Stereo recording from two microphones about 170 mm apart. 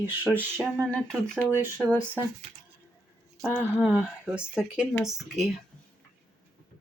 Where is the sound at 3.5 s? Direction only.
10° right (ahead or behind).